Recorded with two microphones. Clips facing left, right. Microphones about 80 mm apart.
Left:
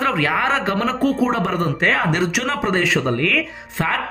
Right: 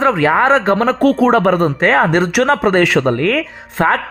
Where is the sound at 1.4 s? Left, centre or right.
Right.